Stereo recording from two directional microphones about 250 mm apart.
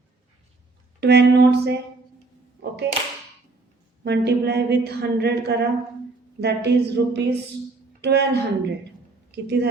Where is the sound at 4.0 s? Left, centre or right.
Right.